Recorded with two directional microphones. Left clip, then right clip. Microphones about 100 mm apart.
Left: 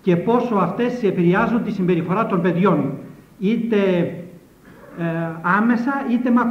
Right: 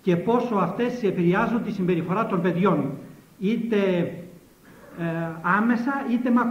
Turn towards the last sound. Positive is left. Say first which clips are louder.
# left 4 dB
turn(degrees=-40)  # may be behind; listen again after turning